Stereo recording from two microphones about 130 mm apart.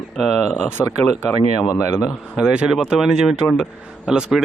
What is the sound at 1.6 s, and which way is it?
Speech, 25° left (ahead or behind).